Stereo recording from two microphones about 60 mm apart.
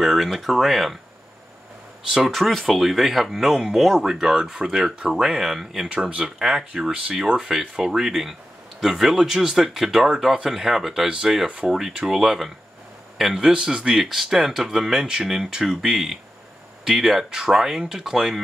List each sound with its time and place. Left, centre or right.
0.0 s speech: centre
2.1 s speech: centre
5.9 s speech: centre
11.1 s speech: centre
12.1 s speech: centre